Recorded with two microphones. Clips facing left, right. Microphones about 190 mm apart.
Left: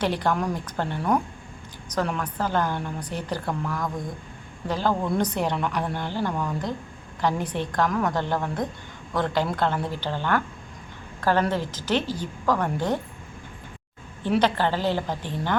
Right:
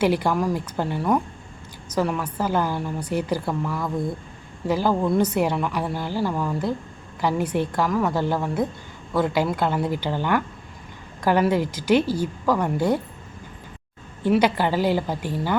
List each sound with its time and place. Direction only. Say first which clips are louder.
0.0 s a woman's voice: right 4 dB; 10° right (ahead or behind)
14.3 s a woman's voice: right 3 dB; 10° right (ahead or behind)